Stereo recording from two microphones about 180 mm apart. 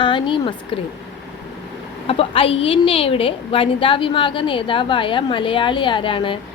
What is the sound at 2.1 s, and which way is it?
A woman's voice, 30° left (ahead or behind).